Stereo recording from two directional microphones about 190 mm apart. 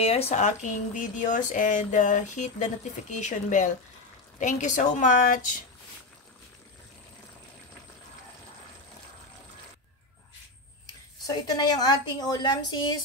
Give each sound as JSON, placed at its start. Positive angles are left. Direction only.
{"t": 0.0, "sound": "speech", "side_deg": 30}
{"t": 11.2, "sound": "a woman's voice", "side_deg": 20}